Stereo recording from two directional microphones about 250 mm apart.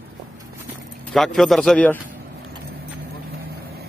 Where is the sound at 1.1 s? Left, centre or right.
Centre.